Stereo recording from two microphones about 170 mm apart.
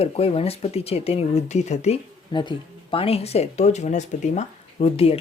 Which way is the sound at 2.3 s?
25° left (ahead or behind).